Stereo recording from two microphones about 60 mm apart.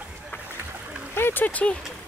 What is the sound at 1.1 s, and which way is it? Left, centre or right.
Speech, left.